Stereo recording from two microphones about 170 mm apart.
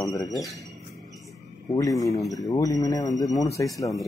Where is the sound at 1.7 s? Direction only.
20° left (ahead or behind).